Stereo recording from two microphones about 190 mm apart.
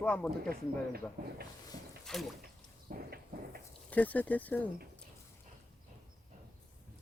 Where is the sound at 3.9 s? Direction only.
10° left (ahead or behind).